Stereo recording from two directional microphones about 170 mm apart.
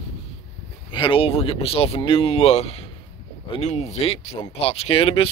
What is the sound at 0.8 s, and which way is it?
Speech, 30° left (ahead or behind).